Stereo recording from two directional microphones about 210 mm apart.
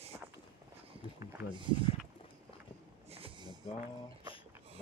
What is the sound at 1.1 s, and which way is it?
Speech, 20° right (ahead or behind).